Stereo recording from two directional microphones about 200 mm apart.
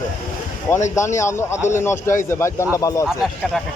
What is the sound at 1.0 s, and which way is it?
Speech, 15° left (ahead or behind).